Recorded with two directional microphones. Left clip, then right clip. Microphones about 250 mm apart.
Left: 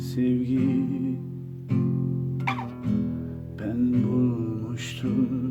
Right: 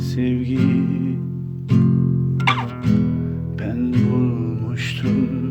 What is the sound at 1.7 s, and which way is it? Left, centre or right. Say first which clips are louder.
Music: right 8 dB; right.